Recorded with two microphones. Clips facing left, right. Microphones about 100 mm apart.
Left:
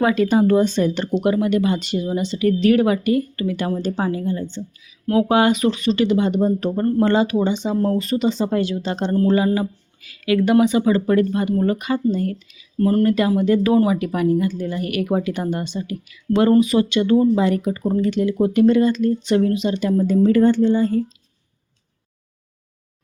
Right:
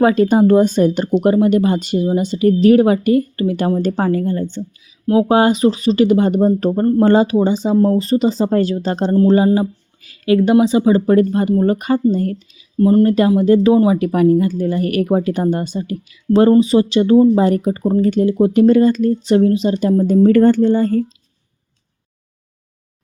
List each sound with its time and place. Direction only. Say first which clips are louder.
0.0 s speech: right 4 dB; 40° right (ahead or behind)
0.7 s speech: right 5 dB; 45° right (ahead or behind)
3.8 s speech: right 6 dB; 45° right (ahead or behind)
5.3 s speech: right 3 dB; 35° right (ahead or behind)
12.8 s speech: right 5 dB; 20° right (ahead or behind); by 21.0 s 50° right (ahead or behind)